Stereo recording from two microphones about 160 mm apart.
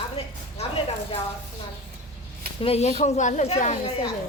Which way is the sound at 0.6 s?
35° left (ahead or behind).